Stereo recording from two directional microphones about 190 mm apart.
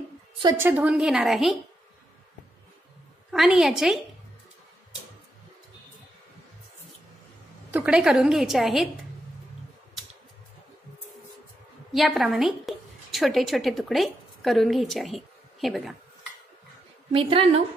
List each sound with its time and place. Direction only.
0.4 s a woman's voice: 15° right (ahead or behind); by 1.6 s centre (ahead or behind)
3.3 s a woman's voice: centre (ahead or behind)
7.7 s a woman's voice: 5° right (ahead or behind)
11.9 s a woman's voice: centre (ahead or behind)
17.1 s a woman's voice: 30° right (ahead or behind)